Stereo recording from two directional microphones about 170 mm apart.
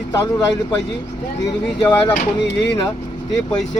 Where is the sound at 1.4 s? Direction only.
20° left (ahead or behind).